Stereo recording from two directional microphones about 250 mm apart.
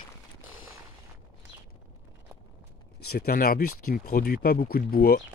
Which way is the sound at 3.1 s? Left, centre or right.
Left.